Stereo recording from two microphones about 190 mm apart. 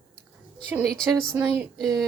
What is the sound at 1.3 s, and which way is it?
Speech, 15° right (ahead or behind).